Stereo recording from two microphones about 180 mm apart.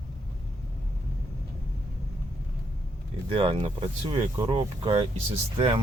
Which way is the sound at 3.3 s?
30° right (ahead or behind).